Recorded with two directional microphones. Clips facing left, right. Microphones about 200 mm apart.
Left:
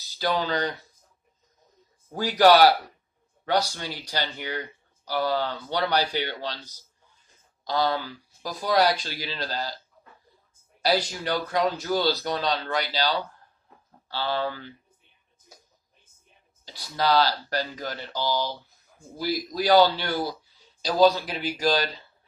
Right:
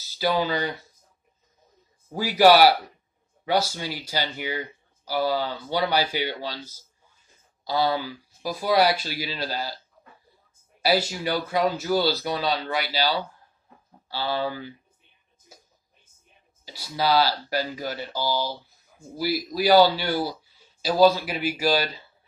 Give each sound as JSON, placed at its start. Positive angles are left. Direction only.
{"t": 0.2, "sound": "speech", "side_deg": -10}
{"t": 2.1, "sound": "speech", "side_deg": -10}
{"t": 10.8, "sound": "speech", "side_deg": -5}
{"t": 16.9, "sound": "speech", "side_deg": -5}